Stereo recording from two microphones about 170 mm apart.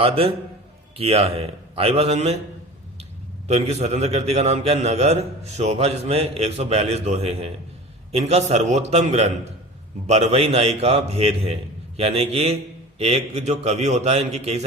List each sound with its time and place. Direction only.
0.0 s a man's voice: 35° right (ahead or behind)
3.4 s a man's voice: 40° right (ahead or behind)